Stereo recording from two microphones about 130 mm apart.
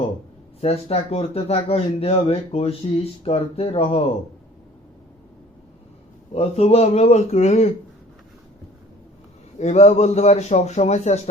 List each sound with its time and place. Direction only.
0.6 s speech: 50° left (ahead or behind)
6.3 s a man's voice: 55° left (ahead or behind)
9.6 s a man's voice: 60° left (ahead or behind)